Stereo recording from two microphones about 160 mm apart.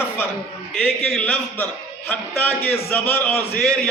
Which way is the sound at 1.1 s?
10° left (ahead or behind).